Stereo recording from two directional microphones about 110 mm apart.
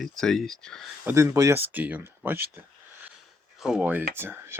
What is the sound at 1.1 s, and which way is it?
Speech, 25° right (ahead or behind).